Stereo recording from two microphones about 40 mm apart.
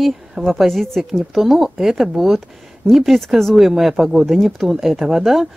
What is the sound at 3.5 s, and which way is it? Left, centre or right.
A woman's voice, centre.